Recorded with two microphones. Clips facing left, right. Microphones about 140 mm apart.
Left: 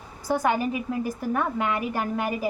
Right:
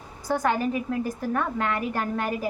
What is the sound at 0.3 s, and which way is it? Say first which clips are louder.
A woman's voice: left 1 dB; 10° left (ahead or behind).